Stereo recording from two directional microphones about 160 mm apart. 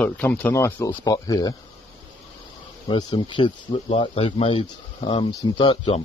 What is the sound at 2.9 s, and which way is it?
Speech, 30° left (ahead or behind).